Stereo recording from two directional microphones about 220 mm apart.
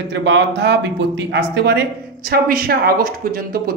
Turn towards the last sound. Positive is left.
turn(degrees=-40)  # may be behind; listen again after turning